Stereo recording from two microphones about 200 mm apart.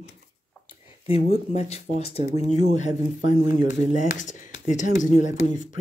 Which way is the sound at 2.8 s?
35° left (ahead or behind).